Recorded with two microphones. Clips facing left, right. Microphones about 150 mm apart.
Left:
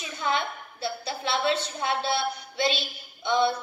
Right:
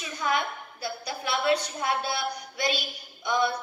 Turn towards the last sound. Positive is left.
turn(degrees=25)  # may be behind; listen again after turning